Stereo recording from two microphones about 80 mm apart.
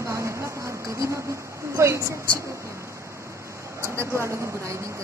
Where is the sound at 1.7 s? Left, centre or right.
Right.